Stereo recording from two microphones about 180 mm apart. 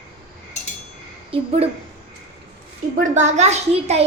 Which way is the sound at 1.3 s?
35° right (ahead or behind).